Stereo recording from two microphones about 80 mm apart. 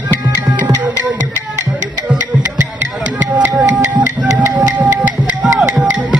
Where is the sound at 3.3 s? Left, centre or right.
Centre.